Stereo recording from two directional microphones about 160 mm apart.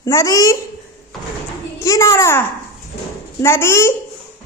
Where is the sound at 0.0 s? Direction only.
20° left (ahead or behind).